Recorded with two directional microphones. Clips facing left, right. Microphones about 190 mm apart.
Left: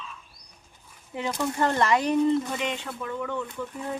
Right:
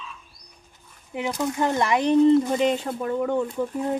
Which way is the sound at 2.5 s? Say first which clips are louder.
Right 9 dB; 40° right (ahead or behind).